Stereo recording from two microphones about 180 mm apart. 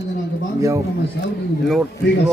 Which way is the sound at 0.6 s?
15° right (ahead or behind).